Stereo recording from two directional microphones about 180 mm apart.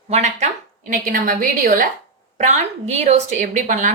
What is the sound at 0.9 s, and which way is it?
A woman's voice, 50° right (ahead or behind).